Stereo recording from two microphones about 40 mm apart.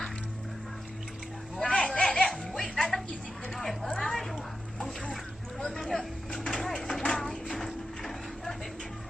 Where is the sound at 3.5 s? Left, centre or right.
Centre.